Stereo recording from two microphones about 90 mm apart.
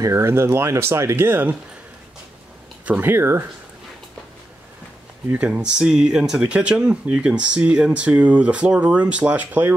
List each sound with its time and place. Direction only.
0.0 s speech: 30° right (ahead or behind)
2.8 s speech: 20° right (ahead or behind)
5.3 s speech: 15° right (ahead or behind)